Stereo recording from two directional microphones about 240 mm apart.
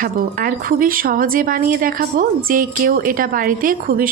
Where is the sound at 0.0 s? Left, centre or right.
Right.